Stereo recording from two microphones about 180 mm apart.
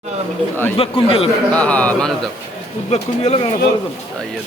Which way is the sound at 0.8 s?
30° left (ahead or behind).